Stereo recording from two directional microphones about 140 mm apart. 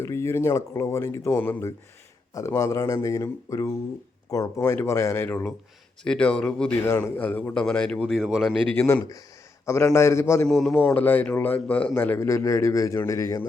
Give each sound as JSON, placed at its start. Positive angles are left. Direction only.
{"t": 0.0, "sound": "a man's voice", "side_deg": 20}
{"t": 8.9, "sound": "speech", "side_deg": 20}
{"t": 10.4, "sound": "speech", "side_deg": 5}
{"t": 10.8, "sound": "a man's voice", "side_deg": 15}